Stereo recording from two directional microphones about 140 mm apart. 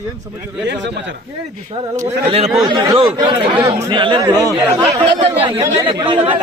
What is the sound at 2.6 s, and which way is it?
Speech, 30° right (ahead or behind).